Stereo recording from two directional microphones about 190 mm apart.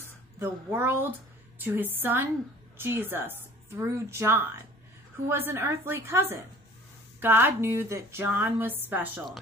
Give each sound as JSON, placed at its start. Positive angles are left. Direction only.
{"t": 0.4, "sound": "speech", "side_deg": -10}